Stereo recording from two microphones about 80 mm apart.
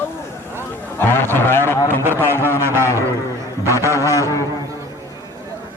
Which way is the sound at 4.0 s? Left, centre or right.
Left.